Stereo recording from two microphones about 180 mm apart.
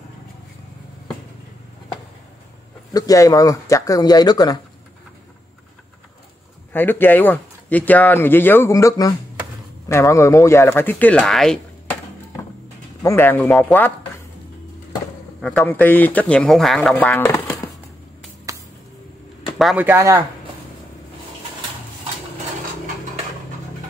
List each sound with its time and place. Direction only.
2.9 s speech: 20° left (ahead or behind)
6.7 s speech: 10° left (ahead or behind)
13.0 s speech: 15° left (ahead or behind)
15.4 s speech: 5° left (ahead or behind)
18.5 s a sound: 20° right (ahead or behind)
19.6 s speech: 5° right (ahead or behind)